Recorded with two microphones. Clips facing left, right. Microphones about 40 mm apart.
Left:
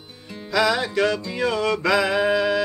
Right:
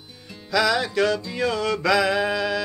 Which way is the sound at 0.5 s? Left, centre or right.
Left.